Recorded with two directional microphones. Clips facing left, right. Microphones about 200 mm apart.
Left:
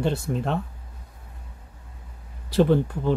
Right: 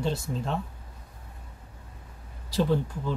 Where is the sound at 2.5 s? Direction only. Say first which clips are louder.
Left 6 dB; 60° left (ahead or behind).